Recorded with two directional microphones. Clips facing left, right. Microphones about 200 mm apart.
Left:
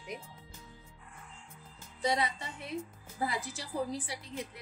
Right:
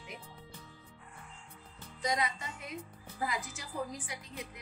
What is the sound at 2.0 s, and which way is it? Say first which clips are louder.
A woman's voice: left 2 dB; 30° left (ahead or behind).